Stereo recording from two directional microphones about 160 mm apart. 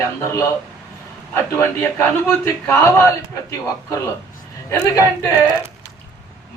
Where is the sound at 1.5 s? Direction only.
15° left (ahead or behind).